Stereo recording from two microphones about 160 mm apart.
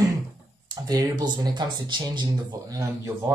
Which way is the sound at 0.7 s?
25° right (ahead or behind).